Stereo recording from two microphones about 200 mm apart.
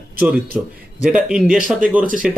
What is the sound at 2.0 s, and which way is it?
Speech, 40° right (ahead or behind).